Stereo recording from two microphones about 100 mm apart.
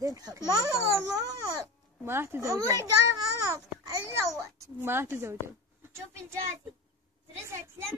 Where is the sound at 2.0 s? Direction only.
25° right (ahead or behind).